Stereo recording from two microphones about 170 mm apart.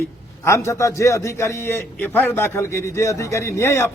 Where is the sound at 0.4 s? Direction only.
15° left (ahead or behind).